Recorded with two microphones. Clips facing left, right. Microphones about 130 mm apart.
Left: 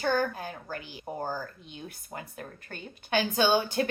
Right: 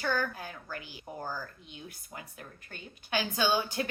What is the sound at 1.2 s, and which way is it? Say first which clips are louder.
Speech: left 4 dB; 55° left (ahead or behind).